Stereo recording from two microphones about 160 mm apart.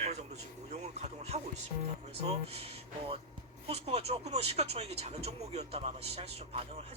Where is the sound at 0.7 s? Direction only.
45° right (ahead or behind).